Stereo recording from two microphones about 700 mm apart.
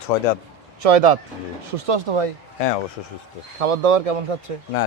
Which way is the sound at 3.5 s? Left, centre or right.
Right.